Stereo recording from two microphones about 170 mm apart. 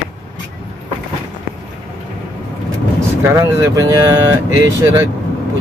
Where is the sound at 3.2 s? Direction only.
20° right (ahead or behind).